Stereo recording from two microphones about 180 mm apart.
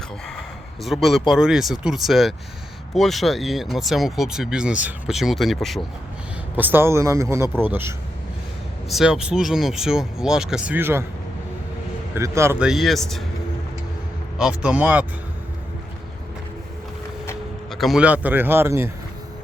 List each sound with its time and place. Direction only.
0.8 s speech: centre (ahead or behind)
6.6 s a man's voice: 10° right (ahead or behind)
12.1 s speech: 15° right (ahead or behind); by 13.2 s centre (ahead or behind)
14.3 s a man's voice: 5° right (ahead or behind)
17.7 s a man's voice: centre (ahead or behind)